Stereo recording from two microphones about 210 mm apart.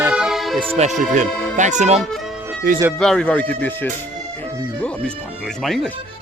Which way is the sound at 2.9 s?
5° left (ahead or behind).